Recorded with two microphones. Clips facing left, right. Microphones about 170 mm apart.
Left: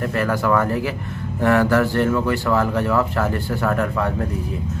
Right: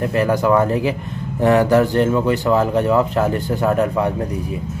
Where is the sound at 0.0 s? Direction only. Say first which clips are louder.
Right 4 dB; 20° right (ahead or behind).